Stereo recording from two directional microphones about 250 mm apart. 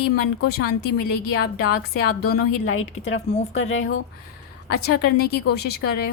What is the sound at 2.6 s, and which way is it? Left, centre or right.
Speech, left.